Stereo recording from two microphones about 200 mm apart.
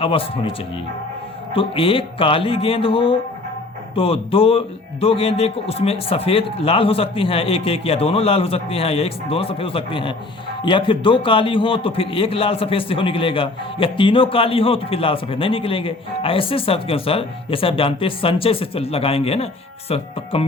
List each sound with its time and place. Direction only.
0.0 s a man's voice: 25° left (ahead or behind)
1.5 s a man's voice: 25° left (ahead or behind)